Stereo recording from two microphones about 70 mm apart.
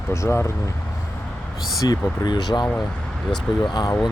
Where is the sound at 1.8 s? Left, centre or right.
Left.